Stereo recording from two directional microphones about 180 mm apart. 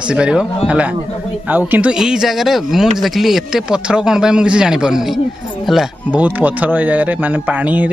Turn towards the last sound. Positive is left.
turn(degrees=-10)  # may be behind; listen again after turning